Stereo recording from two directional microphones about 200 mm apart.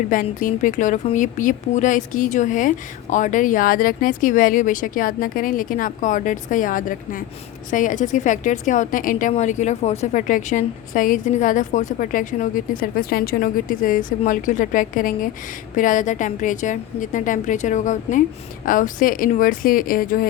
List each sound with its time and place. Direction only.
0.1 s a woman's voice: 40° left (ahead or behind)